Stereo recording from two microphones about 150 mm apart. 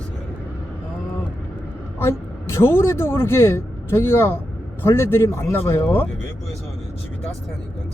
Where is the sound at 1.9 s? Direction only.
15° left (ahead or behind).